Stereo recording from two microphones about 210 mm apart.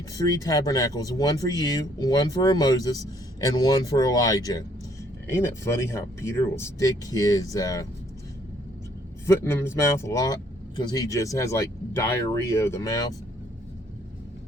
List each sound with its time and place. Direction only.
0.3 s speech: 15° left (ahead or behind)
9.2 s speech: 10° left (ahead or behind)